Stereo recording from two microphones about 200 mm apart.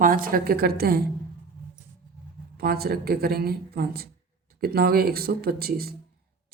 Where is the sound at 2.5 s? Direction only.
50° right (ahead or behind).